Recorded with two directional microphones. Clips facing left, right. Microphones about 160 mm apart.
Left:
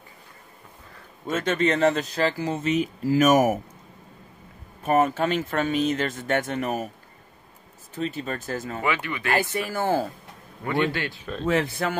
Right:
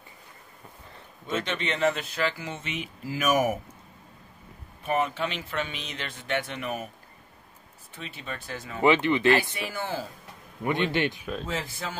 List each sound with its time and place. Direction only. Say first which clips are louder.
1.2 s speech: left 7 dB; 45° left (ahead or behind)
4.8 s speech: left 6 dB; 45° left (ahead or behind)
7.9 s speech: left 9 dB; 40° left (ahead or behind)
8.8 s a man's voice: right 9 dB; 25° right (ahead or behind)
9.4 s speech: left 6 dB; 50° left (ahead or behind)
10.6 s a man's voice: left 1 dB; 20° right (ahead or behind)
11.4 s speech: left 14 dB; 65° left (ahead or behind)